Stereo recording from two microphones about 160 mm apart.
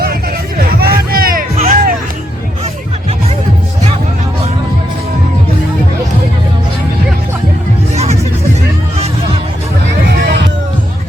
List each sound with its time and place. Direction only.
0.8 s music: 70° right (ahead or behind)
1.5 s music: 55° right (ahead or behind)